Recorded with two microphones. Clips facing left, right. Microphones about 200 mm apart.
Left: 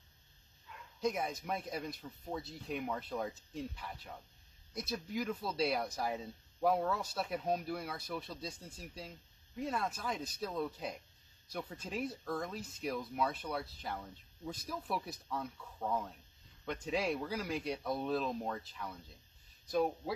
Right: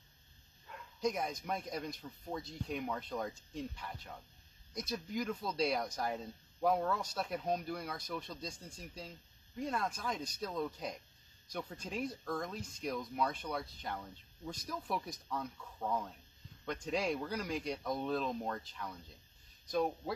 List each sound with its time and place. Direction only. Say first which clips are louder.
0.7 s bow-wow: right 3 dB; 55° right (ahead or behind)
1.0 s speech: even; 5° left (ahead or behind)